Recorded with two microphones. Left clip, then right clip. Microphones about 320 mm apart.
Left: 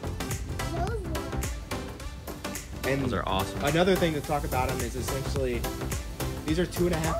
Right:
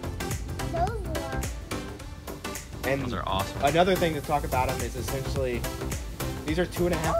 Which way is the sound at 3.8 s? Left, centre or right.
Right.